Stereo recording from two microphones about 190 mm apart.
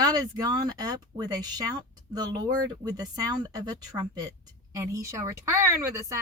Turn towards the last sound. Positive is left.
turn(degrees=-15)  # may be behind; listen again after turning